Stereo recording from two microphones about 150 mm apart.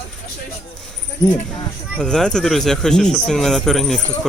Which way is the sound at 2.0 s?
5° left (ahead or behind).